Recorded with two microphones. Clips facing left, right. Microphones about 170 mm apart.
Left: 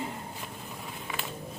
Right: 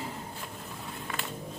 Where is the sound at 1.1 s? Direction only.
Centre (ahead or behind).